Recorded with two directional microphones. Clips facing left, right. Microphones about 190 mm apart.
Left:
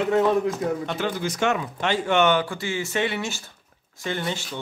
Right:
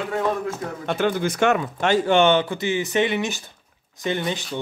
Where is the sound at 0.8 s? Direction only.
55° right (ahead or behind).